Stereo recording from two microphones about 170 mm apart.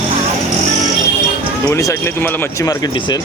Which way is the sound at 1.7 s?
20° left (ahead or behind).